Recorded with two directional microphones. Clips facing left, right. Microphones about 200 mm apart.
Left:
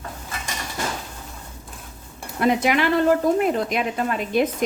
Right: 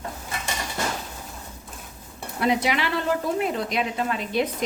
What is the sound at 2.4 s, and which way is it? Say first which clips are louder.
A woman's voice: left 4 dB; 50° left (ahead or behind).